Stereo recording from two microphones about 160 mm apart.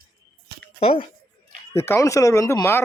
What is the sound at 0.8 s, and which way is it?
Speech, 35° left (ahead or behind).